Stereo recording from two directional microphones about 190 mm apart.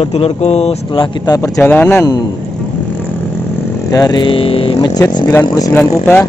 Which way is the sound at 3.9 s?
20° left (ahead or behind).